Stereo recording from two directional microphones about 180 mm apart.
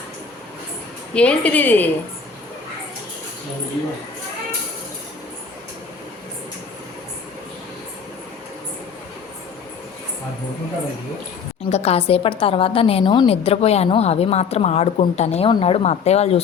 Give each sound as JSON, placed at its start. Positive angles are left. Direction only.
{"t": 1.1, "sound": "a woman's voice", "side_deg": 5}
{"t": 11.7, "sound": "a woman's voice", "side_deg": 35}